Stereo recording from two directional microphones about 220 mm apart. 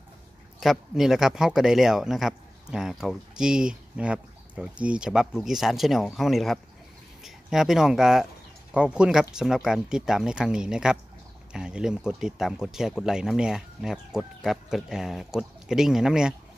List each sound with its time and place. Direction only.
0.6 s speech: centre (ahead or behind)